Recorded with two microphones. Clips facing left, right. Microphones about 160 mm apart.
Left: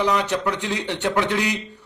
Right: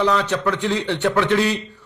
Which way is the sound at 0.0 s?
15° left (ahead or behind).